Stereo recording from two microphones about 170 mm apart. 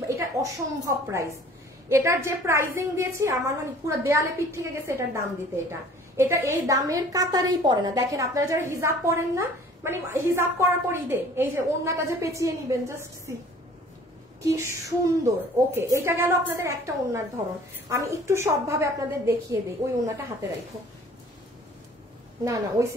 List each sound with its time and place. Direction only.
0.2 s a woman's voice: 20° right (ahead or behind)
22.4 s a woman's voice: 20° right (ahead or behind)